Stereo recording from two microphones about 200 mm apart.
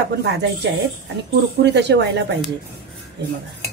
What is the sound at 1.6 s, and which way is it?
Speech, 60° right (ahead or behind).